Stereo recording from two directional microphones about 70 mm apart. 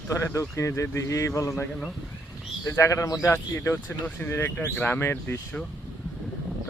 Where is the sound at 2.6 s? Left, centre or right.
Left.